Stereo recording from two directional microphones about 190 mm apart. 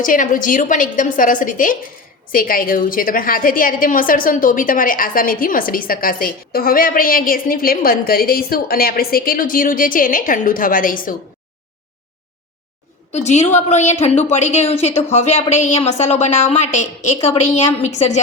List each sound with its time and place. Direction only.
0.0 s a woman's voice: 45° left (ahead or behind)
13.1 s a woman's voice: 35° left (ahead or behind)